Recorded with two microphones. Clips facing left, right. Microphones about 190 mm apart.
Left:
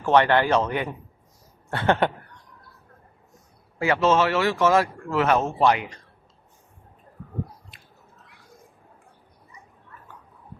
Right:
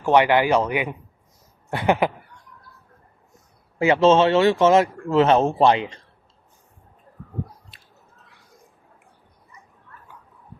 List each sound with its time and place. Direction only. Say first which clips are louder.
0.0 s speech: right 2 dB; 15° right (ahead or behind)
3.8 s speech: right 5 dB; 20° right (ahead or behind)